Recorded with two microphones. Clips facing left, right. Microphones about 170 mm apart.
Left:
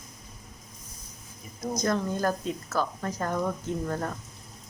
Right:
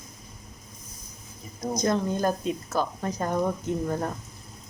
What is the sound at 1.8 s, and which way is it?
A woman's voice, 20° right (ahead or behind).